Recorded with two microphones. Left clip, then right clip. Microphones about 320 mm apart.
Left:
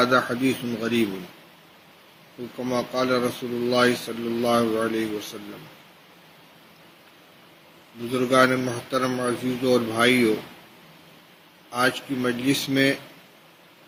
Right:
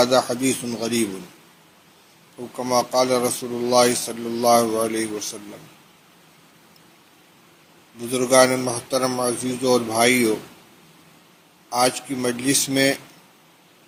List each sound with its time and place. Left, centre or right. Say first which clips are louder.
0.0 s speech: right 2 dB; centre
2.7 s speech: right 5 dB; centre
8.1 s speech: right 3 dB; centre
11.7 s speech: right 3 dB; centre